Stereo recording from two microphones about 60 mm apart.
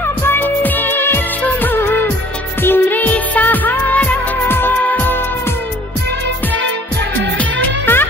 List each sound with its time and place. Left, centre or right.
0.0 s music of bollywood: left
2.6 s music: left
7.8 s music: left